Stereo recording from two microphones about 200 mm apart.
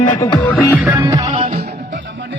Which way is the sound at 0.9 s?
15° right (ahead or behind).